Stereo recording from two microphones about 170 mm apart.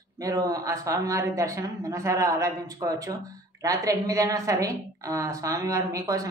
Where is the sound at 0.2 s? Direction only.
20° right (ahead or behind).